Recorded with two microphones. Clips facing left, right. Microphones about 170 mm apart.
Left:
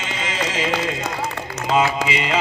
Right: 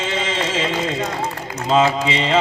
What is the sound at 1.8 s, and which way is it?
Heart sounds, 30° right (ahead or behind).